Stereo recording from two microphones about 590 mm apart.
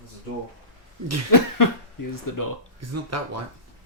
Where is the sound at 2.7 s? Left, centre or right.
Right.